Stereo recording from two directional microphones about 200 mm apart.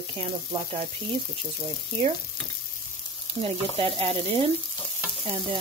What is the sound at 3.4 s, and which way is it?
Frying, 30° right (ahead or behind).